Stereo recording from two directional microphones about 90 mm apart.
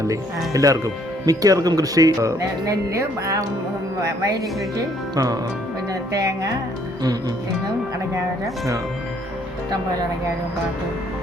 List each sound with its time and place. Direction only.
0.1 s speech: 40° right (ahead or behind)